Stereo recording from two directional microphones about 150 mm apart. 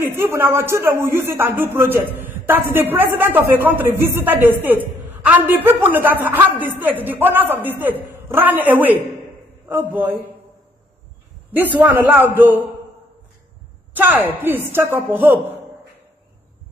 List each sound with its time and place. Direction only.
0.0 s a man's voice: 15° right (ahead or behind)
11.5 s a man's voice: 10° right (ahead or behind)
13.9 s a man's voice: 10° right (ahead or behind)